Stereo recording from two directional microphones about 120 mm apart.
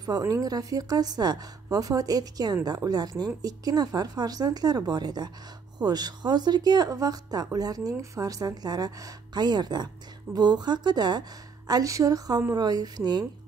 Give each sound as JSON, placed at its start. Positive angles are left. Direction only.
{"t": 0.0, "sound": "a woman's voice", "side_deg": -30}